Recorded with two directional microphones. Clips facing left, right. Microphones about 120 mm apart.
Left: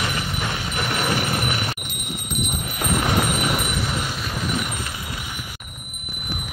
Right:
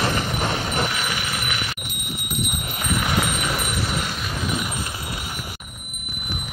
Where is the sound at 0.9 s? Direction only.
45° left (ahead or behind).